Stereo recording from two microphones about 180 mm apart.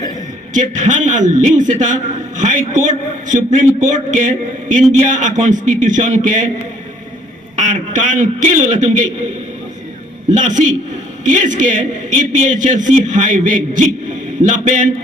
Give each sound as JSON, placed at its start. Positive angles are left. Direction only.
{"t": 0.5, "sound": "a man's voice", "side_deg": -45}
{"t": 7.6, "sound": "a man's voice", "side_deg": -45}
{"t": 10.3, "sound": "a man's voice", "side_deg": -45}